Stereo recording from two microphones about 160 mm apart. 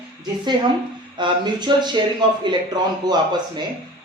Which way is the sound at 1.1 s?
30° right (ahead or behind).